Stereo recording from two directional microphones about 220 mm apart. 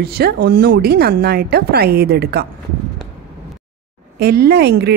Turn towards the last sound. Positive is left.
turn(degrees=-50)  # may be behind; listen again after turning